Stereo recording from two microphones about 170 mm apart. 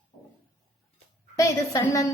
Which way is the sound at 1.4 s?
20° left (ahead or behind).